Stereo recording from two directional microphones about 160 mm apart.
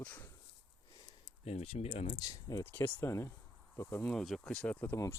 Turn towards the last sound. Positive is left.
turn(degrees=15)  # may be behind; listen again after turning